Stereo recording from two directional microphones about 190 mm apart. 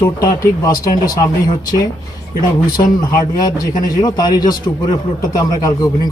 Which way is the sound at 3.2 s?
20° left (ahead or behind).